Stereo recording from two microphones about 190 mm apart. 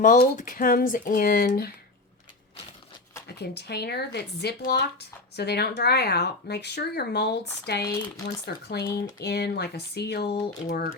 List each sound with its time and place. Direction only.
0.0 s speech: 40° left (ahead or behind)
3.2 s speech: 60° left (ahead or behind)
10.3 s speech: 45° left (ahead or behind)